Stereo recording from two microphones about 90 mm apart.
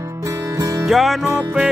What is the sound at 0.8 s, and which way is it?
Music, centre (ahead or behind).